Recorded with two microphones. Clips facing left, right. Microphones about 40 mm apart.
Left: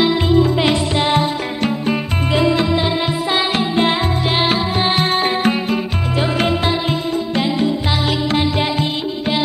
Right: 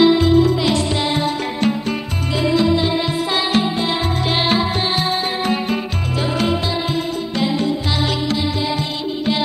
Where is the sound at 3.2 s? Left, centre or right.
Centre.